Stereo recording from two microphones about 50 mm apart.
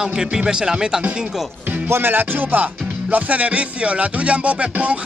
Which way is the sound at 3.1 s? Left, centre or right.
Right.